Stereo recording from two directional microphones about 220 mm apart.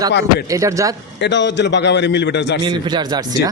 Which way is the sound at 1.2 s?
55° left (ahead or behind).